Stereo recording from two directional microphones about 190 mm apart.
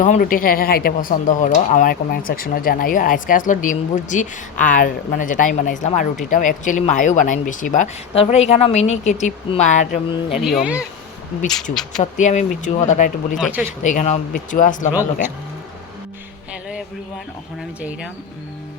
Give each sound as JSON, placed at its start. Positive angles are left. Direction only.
{"t": 0.0, "sound": "speech", "side_deg": 45}
{"t": 10.4, "sound": "speech", "side_deg": -5}
{"t": 12.1, "sound": "speech", "side_deg": 40}
{"t": 13.4, "sound": "speech", "side_deg": -5}
{"t": 13.8, "sound": "speech", "side_deg": 40}